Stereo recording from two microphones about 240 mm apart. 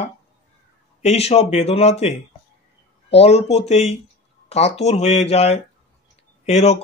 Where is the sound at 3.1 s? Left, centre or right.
Left.